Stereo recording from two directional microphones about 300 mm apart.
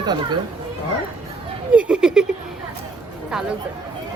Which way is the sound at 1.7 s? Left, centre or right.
Centre.